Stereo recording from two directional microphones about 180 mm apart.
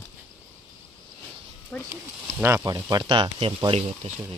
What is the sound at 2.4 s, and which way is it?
Speech, 15° right (ahead or behind).